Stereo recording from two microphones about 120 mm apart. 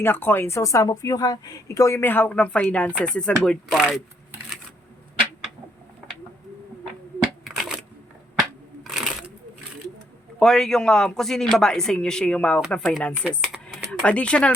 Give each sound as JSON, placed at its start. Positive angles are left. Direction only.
{"t": 0.0, "sound": "speech", "side_deg": 15}
{"t": 3.8, "sound": "speech", "side_deg": -5}
{"t": 7.4, "sound": "shuffling cards", "side_deg": -5}
{"t": 8.4, "sound": "a sound", "side_deg": 0}
{"t": 10.4, "sound": "speech", "side_deg": 5}